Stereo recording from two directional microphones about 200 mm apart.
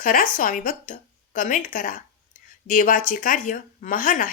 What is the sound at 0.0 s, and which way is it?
A woman's voice, 45° left (ahead or behind).